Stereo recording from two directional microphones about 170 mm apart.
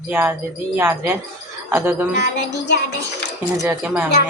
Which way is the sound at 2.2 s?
85° left.